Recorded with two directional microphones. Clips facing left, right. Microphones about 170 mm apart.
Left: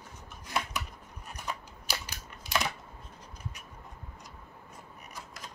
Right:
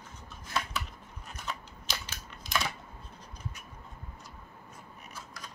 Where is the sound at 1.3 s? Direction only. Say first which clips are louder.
Left 1 dB; 15° left (ahead or behind).